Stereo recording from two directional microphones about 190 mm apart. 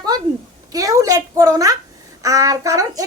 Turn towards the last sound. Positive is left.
turn(degrees=-20)  # may be behind; listen again after turning